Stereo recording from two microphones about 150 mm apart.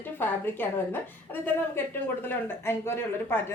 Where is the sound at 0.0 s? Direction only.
15° left (ahead or behind).